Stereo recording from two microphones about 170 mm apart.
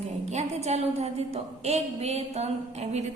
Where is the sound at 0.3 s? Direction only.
40° right (ahead or behind).